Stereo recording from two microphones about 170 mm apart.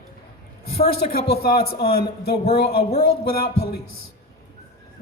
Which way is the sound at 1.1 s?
65° left (ahead or behind).